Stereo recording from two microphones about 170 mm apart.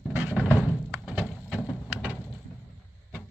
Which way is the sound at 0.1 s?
10° right (ahead or behind).